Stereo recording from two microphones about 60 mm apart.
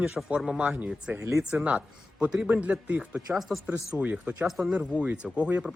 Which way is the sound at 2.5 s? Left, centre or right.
Right.